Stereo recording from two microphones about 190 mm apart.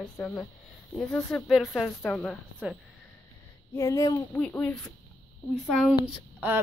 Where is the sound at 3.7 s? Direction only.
15° left (ahead or behind).